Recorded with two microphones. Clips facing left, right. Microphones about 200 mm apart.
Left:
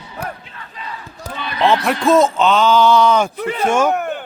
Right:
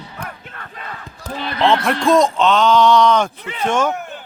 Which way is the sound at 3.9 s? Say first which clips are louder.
Left 8 dB; 60° left (ahead or behind).